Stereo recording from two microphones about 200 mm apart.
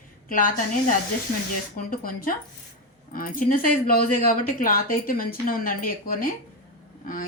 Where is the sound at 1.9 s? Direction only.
45° left (ahead or behind).